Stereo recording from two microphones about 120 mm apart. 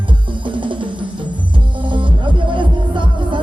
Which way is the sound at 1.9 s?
40° right (ahead or behind).